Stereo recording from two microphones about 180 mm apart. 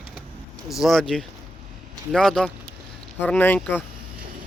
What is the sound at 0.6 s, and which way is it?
Speech, centre (ahead or behind).